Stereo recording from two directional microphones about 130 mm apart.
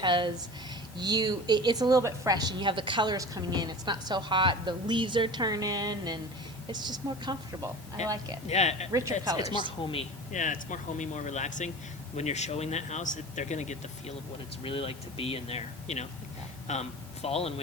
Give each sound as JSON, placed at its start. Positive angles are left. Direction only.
{"t": 0.0, "sound": "a woman's voice", "side_deg": -40}
{"t": 8.4, "sound": "speech", "side_deg": 55}
{"t": 8.9, "sound": "speech", "side_deg": -25}
{"t": 9.5, "sound": "a woman's voice", "side_deg": -35}
{"t": 10.3, "sound": "speech", "side_deg": 75}
{"t": 14.6, "sound": "speech", "side_deg": 45}